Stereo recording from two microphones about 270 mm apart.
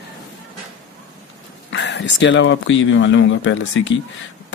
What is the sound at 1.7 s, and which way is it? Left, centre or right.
Speech, left.